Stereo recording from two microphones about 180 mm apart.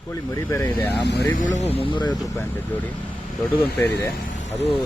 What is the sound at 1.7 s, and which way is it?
Speech, 30° left (ahead or behind).